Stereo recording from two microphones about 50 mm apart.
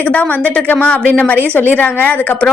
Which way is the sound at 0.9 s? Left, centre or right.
Left.